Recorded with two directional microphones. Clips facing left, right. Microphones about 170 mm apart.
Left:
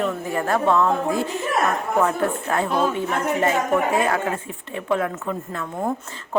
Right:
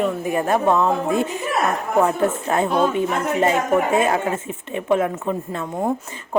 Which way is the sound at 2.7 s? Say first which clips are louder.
Right 2 dB; centre (ahead or behind).